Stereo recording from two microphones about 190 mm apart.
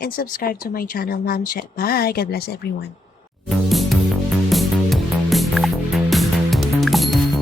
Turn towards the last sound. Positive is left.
turn(degrees=0)  # may be behind; listen again after turning